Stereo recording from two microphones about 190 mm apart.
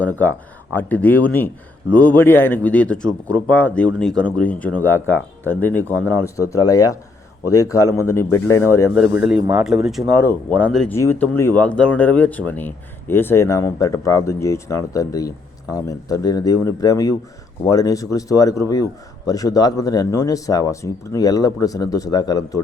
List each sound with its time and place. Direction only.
0.0 s speech: 10° left (ahead or behind)
9.0 s speech: 5° right (ahead or behind); by 22.6 s 20° left (ahead or behind)